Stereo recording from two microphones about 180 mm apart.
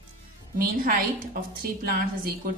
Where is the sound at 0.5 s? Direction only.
50° right (ahead or behind).